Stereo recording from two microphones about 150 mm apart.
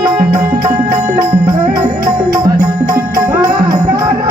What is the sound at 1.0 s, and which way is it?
Music, 20° right (ahead or behind).